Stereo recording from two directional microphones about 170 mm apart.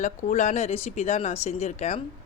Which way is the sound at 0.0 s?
45° left (ahead or behind).